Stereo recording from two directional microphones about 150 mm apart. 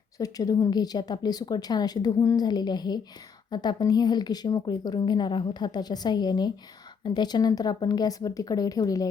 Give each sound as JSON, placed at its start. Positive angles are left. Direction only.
{"t": 0.2, "sound": "a woman's voice", "side_deg": 25}